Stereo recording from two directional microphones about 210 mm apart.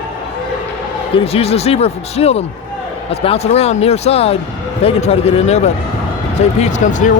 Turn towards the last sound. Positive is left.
turn(degrees=35)  # may be behind; listen again after turning